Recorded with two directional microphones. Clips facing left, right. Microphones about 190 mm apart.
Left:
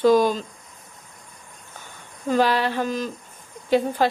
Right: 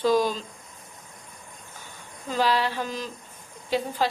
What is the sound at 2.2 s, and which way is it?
Speech, 55° left (ahead or behind).